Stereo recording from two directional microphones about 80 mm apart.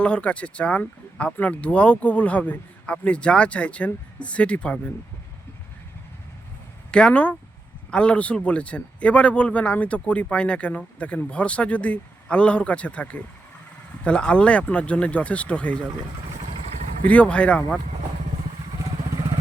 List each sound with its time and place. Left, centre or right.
0.0 s a man's voice: centre
6.9 s a man's voice: centre
17.1 s a man's voice: centre